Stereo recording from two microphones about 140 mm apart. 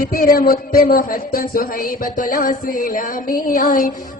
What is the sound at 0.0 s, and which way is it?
Speech, 90° left.